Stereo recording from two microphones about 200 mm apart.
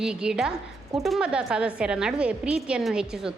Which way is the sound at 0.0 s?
5° right (ahead or behind).